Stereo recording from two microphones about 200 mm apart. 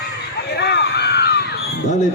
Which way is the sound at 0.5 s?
55° left (ahead or behind).